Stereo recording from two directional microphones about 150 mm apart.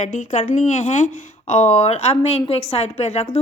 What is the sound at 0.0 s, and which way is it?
A woman's voice, 55° left (ahead or behind).